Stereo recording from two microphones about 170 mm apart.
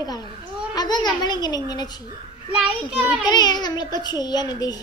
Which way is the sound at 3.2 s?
25° left (ahead or behind).